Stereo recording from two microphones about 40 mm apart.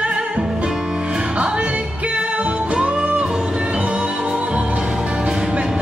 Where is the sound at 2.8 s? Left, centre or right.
Right.